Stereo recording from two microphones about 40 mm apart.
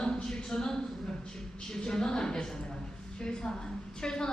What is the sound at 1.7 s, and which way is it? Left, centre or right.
A woman's voice, centre.